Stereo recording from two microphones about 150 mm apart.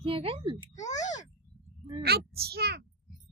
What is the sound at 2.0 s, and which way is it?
Speech, 90° right.